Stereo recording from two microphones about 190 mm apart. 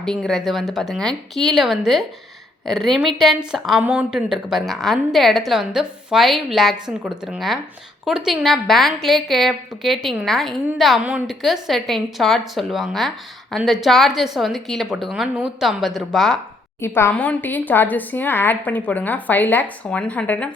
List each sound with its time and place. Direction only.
0.0 s a woman's voice: centre (ahead or behind)
16.8 s a woman's voice: 10° left (ahead or behind)